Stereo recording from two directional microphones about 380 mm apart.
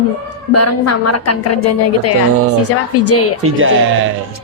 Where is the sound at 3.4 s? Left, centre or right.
Right.